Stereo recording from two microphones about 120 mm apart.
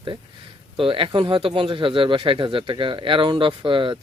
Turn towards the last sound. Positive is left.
turn(degrees=-45)  # may be behind; listen again after turning